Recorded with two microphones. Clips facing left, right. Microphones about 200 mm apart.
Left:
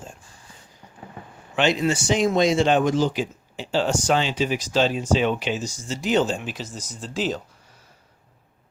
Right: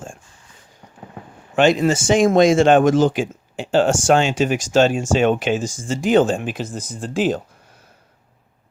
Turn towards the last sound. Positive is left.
turn(degrees=-55)  # may be behind; listen again after turning